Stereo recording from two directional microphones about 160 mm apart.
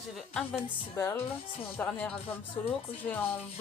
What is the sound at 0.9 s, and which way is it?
Speech, 15° left (ahead or behind).